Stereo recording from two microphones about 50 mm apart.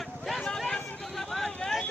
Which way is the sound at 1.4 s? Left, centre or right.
Centre.